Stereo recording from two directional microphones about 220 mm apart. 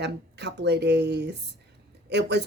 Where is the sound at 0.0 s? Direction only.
50° right (ahead or behind).